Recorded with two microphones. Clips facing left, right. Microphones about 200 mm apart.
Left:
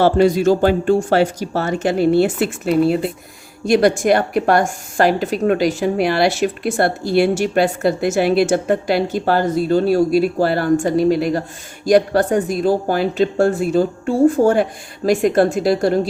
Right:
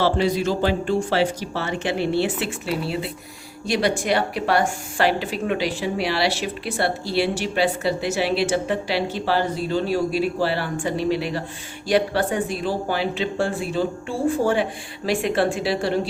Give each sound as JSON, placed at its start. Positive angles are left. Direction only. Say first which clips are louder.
{"t": 0.0, "sound": "a woman's voice", "louder": "left 7 dB", "side_deg": 45}